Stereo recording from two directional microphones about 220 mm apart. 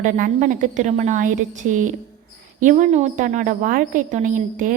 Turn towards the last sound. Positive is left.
turn(degrees=-35)  # may be behind; listen again after turning